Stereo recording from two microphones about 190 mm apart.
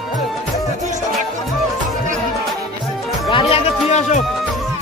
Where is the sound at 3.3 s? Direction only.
30° left (ahead or behind).